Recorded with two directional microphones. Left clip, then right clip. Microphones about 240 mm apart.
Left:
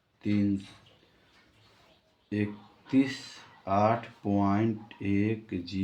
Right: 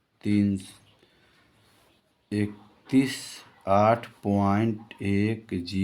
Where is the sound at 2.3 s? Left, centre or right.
Right.